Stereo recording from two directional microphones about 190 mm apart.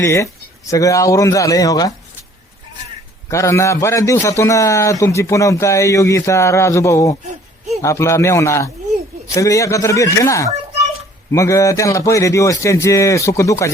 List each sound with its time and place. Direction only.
0.0 s a man's voice: 15° left (ahead or behind)
3.2 s a man's voice: 15° left (ahead or behind)